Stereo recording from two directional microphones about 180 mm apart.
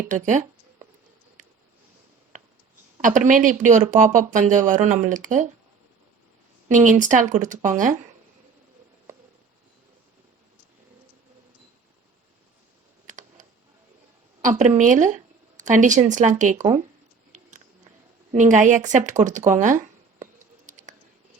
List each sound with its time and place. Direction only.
0.1 s speech: 40° right (ahead or behind)
3.0 s speech: 45° right (ahead or behind)
6.7 s speech: 45° right (ahead or behind)
13.1 s computer keyboard: 45° right (ahead or behind)
14.8 s speech: 45° right (ahead or behind)
18.3 s speech: 45° right (ahead or behind)
19.5 s a sound: 45° right (ahead or behind)